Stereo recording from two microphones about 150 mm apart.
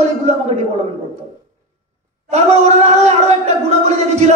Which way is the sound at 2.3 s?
50° right (ahead or behind).